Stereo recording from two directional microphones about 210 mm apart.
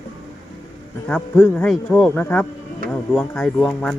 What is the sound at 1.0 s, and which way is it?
Speech, 10° left (ahead or behind).